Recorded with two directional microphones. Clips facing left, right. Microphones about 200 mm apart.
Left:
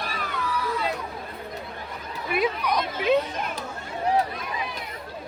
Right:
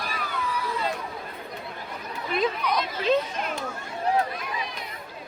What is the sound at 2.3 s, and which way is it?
Chatter, 10° left (ahead or behind).